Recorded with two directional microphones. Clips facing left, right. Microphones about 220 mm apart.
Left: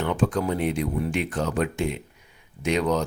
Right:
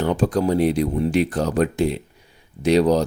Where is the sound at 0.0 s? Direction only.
35° right (ahead or behind).